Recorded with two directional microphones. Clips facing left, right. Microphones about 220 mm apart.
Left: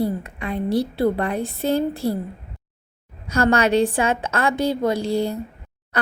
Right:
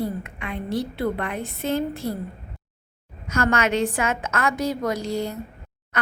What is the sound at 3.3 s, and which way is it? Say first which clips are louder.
A woman's voice: left 4 dB; 35° left (ahead or behind).